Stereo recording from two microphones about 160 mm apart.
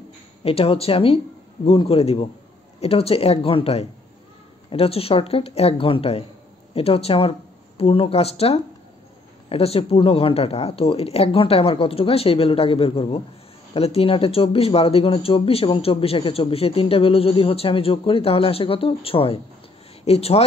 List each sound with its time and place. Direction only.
0.4 s speech: 35° left (ahead or behind)